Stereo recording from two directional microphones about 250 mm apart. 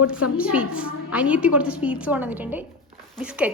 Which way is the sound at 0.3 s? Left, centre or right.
Centre.